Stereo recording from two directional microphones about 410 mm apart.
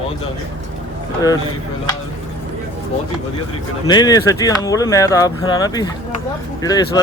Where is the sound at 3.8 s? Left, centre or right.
Centre.